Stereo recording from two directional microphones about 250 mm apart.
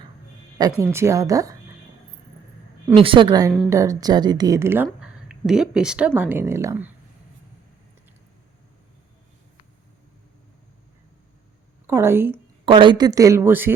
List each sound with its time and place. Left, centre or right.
0.8 s a woman's voice: centre
3.0 s a woman's voice: centre
11.9 s a woman's voice: centre